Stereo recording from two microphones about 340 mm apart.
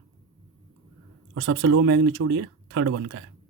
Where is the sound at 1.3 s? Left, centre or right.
Right.